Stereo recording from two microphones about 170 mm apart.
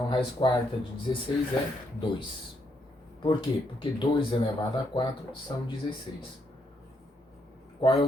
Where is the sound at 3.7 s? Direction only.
30° left (ahead or behind).